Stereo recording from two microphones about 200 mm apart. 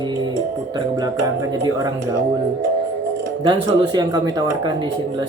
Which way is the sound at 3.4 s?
20° right (ahead or behind).